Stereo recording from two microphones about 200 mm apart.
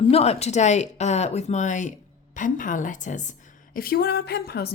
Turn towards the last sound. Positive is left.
turn(degrees=55)  # may be behind; listen again after turning